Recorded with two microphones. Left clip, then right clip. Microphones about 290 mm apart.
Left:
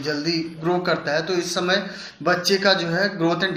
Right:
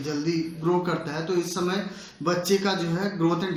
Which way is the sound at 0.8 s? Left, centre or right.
Centre.